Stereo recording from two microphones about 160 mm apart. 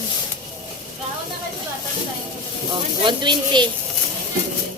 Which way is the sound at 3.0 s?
30° right (ahead or behind).